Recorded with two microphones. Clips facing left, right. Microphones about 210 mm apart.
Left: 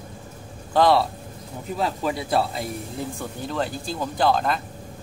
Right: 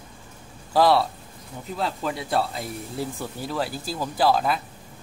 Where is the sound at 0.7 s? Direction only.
Centre (ahead or behind).